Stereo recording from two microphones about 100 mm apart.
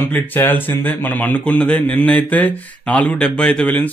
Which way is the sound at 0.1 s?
20° left (ahead or behind).